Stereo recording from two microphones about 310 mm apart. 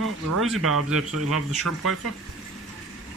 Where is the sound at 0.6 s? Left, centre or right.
Right.